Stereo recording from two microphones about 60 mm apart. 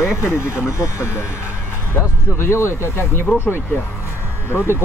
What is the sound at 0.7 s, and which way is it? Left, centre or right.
Speech, left.